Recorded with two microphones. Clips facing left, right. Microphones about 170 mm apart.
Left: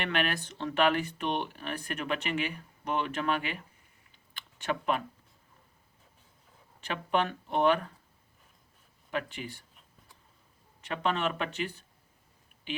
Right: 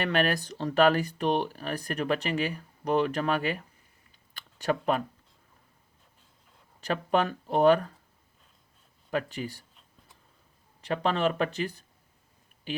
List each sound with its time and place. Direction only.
0.0 s speech: 40° right (ahead or behind)
6.8 s speech: 40° right (ahead or behind)
9.0 s speech: 40° right (ahead or behind)
10.8 s speech: 35° right (ahead or behind)